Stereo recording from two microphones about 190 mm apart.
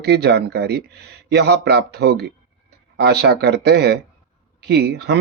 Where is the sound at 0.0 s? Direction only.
60° right (ahead or behind).